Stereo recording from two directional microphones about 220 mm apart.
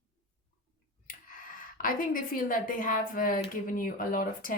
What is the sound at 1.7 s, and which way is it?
A woman's voice, 40° left (ahead or behind).